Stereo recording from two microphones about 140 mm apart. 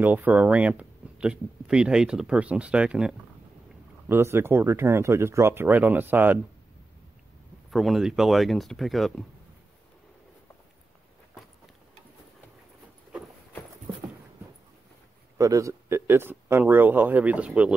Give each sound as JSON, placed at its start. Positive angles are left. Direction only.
{"t": 0.0, "sound": "speech", "side_deg": -10}
{"t": 4.1, "sound": "speech", "side_deg": -15}
{"t": 7.7, "sound": "speech", "side_deg": 0}
{"t": 15.3, "sound": "speech", "side_deg": -20}